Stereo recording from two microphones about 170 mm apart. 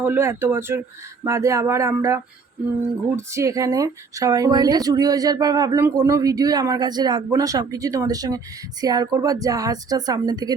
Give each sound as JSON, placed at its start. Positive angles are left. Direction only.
{"t": 0.0, "sound": "speech", "side_deg": -15}